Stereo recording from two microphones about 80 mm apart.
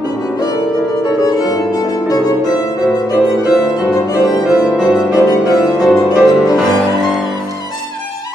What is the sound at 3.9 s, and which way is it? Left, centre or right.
Music, left.